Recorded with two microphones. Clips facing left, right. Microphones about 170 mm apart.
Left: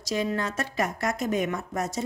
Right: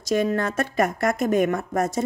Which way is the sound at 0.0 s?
55° right (ahead or behind).